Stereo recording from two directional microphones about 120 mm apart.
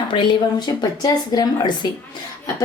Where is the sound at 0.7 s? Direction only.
35° left (ahead or behind).